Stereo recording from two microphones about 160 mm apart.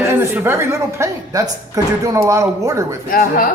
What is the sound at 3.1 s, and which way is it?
Speech, 60° left (ahead or behind).